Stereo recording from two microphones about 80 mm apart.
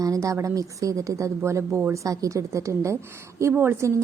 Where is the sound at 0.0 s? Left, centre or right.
Right.